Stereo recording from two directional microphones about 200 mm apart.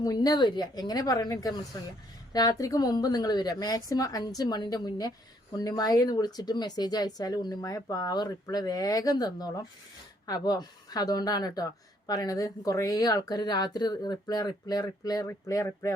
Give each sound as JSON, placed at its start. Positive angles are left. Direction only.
{"t": 0.0, "sound": "a woman's voice", "side_deg": 20}